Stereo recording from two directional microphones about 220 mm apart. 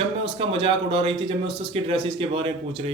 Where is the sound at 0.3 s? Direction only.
25° right (ahead or behind).